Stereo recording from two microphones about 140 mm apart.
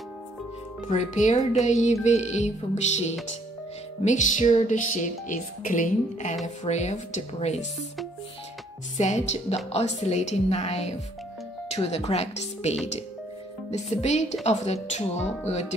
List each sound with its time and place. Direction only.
0.8 s music: 60° left (ahead or behind)
6.4 s music: 55° left (ahead or behind)
8.9 s music: 55° left (ahead or behind)
9.7 s speech: 50° left (ahead or behind)